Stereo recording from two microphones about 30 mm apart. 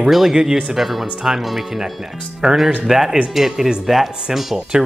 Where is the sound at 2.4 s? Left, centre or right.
Right.